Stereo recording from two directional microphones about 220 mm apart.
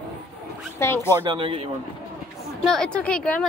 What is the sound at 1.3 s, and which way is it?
Speech, 25° right (ahead or behind).